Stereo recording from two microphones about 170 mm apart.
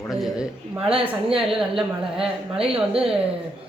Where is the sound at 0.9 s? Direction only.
35° right (ahead or behind).